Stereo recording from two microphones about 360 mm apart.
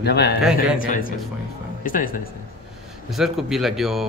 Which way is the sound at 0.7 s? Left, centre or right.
Left.